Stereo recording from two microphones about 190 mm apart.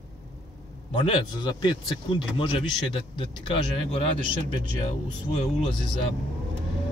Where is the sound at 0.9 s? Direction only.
25° left (ahead or behind).